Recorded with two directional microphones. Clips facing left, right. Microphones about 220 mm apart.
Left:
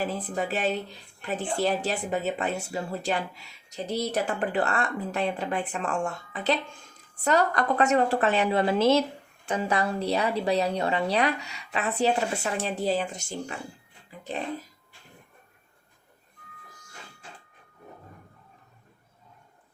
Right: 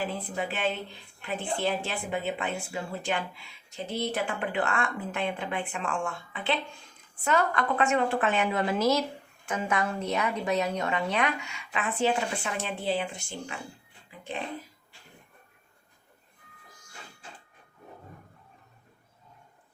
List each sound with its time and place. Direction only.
0.1 s a woman's voice: 40° left (ahead or behind)